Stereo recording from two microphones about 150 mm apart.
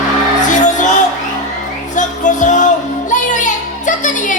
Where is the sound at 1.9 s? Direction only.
55° left (ahead or behind).